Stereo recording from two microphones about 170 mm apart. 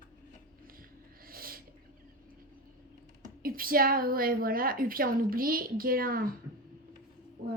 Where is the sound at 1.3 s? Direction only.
60° right (ahead or behind).